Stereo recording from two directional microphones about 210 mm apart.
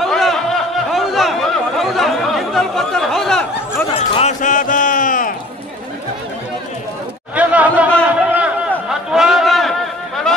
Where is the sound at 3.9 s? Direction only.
30° left (ahead or behind).